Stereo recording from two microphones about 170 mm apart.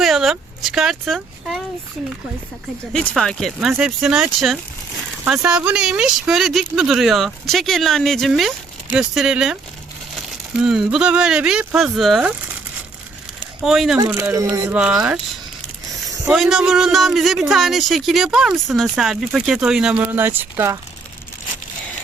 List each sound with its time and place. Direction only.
0.0 s speech: centre (ahead or behind)
2.9 s speech: 5° left (ahead or behind)
13.6 s speech: centre (ahead or behind)
14.3 s speech: 20° right (ahead or behind)
14.8 s speech: 5° right (ahead or behind)
16.3 s speech: centre (ahead or behind)